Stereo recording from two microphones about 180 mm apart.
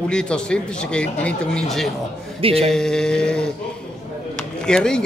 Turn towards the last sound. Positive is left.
turn(degrees=5)  # may be behind; listen again after turning